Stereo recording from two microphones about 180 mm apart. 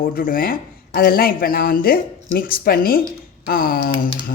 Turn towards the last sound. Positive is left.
turn(degrees=50)  # may be behind; listen again after turning